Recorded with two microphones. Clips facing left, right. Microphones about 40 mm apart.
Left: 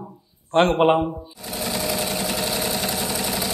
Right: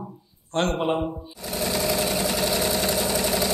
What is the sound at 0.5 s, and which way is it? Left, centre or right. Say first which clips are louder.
Speech: left 7 dB; left.